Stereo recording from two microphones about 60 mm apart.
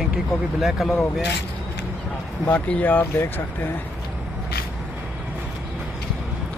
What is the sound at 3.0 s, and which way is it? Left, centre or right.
Speech, left.